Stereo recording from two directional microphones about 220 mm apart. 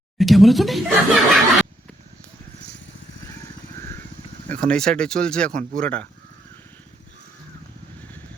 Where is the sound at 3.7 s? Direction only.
10° left (ahead or behind).